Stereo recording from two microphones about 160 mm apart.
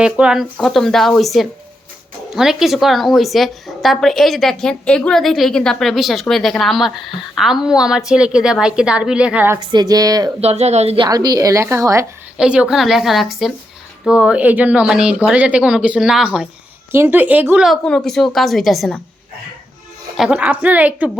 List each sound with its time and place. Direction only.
0.0 s a woman's voice: 5° right (ahead or behind)
9.6 s a woman's voice: 25° right (ahead or behind)
10.4 s a woman's voice: 40° right (ahead or behind); by 12.0 s 20° right (ahead or behind)
12.4 s a woman's voice: 5° right (ahead or behind)
20.1 s speech: 5° right (ahead or behind)